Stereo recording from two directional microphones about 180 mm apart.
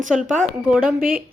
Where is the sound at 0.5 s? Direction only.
5° right (ahead or behind).